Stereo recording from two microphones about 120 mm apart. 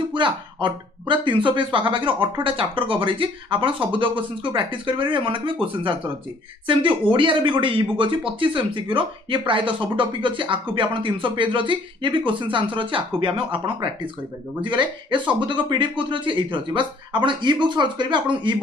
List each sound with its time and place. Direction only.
0.1 s speech: 40° right (ahead or behind)
6.7 s speech: 45° right (ahead or behind)